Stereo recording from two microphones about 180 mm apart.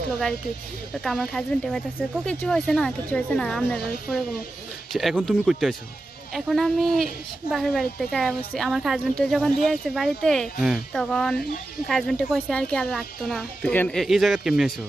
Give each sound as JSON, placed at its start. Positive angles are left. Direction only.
{"t": 1.0, "sound": "a woman's voice", "side_deg": 5}